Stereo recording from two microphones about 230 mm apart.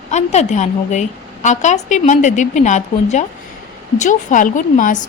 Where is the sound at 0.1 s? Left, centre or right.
Left.